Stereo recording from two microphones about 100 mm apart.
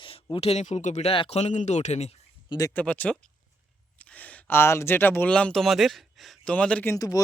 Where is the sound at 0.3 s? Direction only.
90° left.